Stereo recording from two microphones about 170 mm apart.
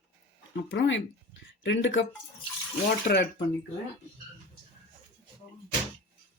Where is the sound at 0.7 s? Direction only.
90° left.